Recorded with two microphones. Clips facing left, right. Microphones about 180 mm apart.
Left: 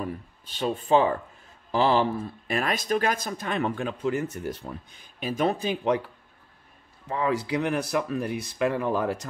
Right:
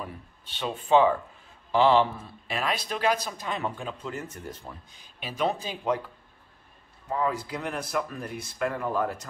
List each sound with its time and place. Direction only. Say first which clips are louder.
0.0 s speech: left 6 dB; 45° left (ahead or behind); by 4.9 s 70° left (ahead or behind)
5.2 s speech: left 3 dB; 50° left (ahead or behind); by 6.0 s 65° left (ahead or behind)
7.1 s speech: left 2 dB; 75° left (ahead or behind)